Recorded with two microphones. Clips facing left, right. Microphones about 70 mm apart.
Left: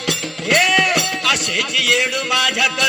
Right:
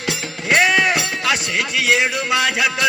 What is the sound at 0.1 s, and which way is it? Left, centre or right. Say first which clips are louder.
Speech: even; right.